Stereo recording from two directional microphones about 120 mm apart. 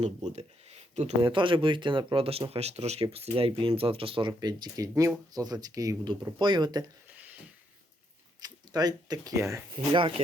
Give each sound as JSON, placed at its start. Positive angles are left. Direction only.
{"t": 0.0, "sound": "speech", "side_deg": -70}
{"t": 1.2, "sound": "speech", "side_deg": -45}
{"t": 4.3, "sound": "speech", "side_deg": -35}
{"t": 6.4, "sound": "speech", "side_deg": -40}
{"t": 8.4, "sound": "speech", "side_deg": -35}
{"t": 9.7, "sound": "speech", "side_deg": -45}